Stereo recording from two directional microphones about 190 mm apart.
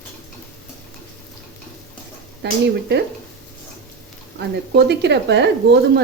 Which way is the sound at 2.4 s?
60° right (ahead or behind).